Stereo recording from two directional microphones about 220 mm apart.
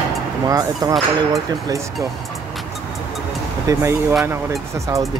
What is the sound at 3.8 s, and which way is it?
Speech, 15° right (ahead or behind).